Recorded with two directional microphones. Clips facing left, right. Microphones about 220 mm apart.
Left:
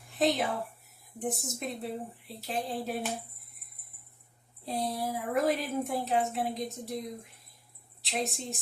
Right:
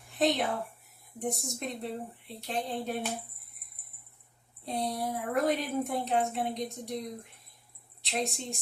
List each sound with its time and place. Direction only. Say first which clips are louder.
0.0 s a woman's voice: even; centre (ahead or behind)
4.6 s a woman's voice: even; centre (ahead or behind)